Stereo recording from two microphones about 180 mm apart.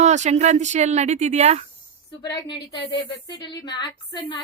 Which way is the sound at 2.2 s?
25° left (ahead or behind).